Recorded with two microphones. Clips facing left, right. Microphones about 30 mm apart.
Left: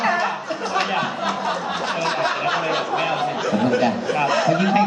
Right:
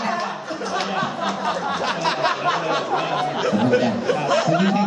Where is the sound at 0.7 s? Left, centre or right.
Centre.